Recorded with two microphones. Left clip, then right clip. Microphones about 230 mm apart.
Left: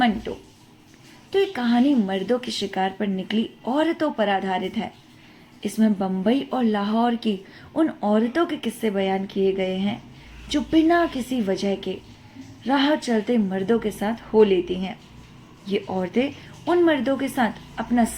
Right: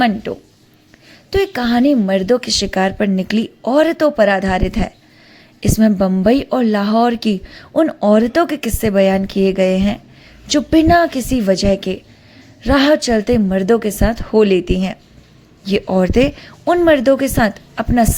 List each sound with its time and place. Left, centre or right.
0.0 s a woman's voice: right